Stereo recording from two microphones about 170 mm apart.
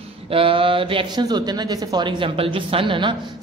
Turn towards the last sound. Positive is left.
turn(degrees=-30)  # may be behind; listen again after turning